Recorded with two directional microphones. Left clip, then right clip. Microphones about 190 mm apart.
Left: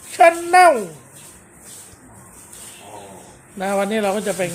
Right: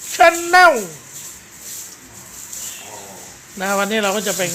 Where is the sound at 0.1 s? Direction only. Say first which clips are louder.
Right 1 dB; centre (ahead or behind).